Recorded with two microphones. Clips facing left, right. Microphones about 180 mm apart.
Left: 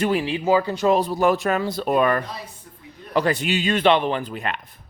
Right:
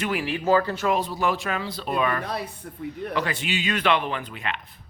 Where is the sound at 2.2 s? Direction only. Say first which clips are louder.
Right 5 dB; 65° right (ahead or behind).